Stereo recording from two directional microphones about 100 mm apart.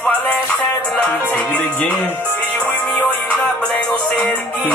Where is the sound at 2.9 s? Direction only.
15° left (ahead or behind).